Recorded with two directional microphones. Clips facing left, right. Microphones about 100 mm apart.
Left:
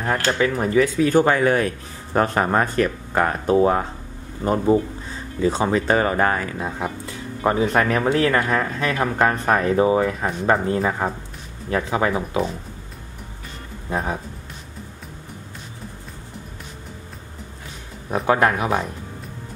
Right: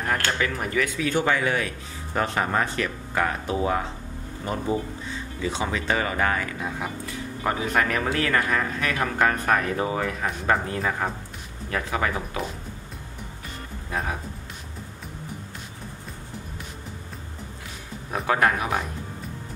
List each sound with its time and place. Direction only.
0.0 s speech: 30° left (ahead or behind)
13.8 s speech: 30° left (ahead or behind)
18.2 s speech: 25° left (ahead or behind)